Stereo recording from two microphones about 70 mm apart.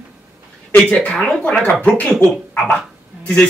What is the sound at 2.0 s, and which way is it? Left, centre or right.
Speech, centre.